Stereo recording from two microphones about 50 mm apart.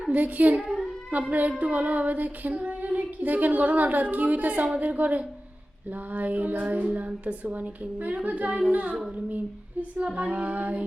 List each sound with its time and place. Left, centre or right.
0.1 s speech: right
10.0 s child singing: right